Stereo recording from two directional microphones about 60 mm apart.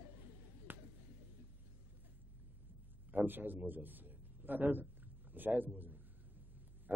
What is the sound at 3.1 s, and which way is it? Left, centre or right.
A man's voice, right.